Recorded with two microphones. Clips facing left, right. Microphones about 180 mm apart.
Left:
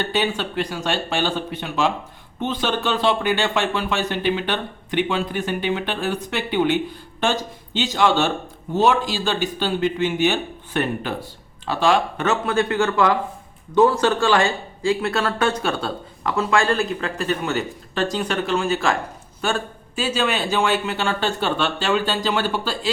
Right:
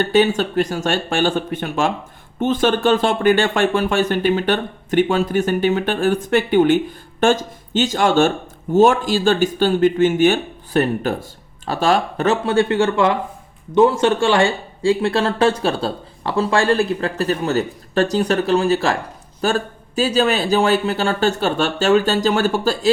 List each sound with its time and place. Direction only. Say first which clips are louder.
0.0 s speech: right 7 dB; 45° right (ahead or behind)